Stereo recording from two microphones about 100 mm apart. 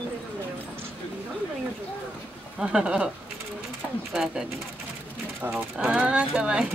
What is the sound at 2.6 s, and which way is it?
Speech, 5° right (ahead or behind).